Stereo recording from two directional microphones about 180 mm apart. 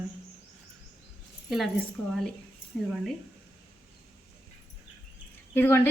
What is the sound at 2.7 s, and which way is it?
Speech, centre (ahead or behind).